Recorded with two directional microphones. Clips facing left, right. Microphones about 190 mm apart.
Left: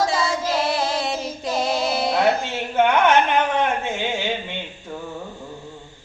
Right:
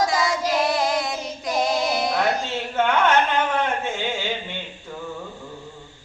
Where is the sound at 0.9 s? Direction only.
30° left (ahead or behind).